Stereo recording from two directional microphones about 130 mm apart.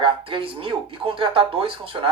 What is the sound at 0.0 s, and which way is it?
Speech, 45° right (ahead or behind).